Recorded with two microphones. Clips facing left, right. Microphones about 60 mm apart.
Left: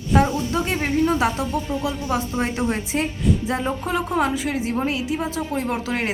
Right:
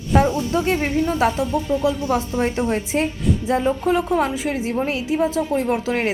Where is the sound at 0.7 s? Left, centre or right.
Left.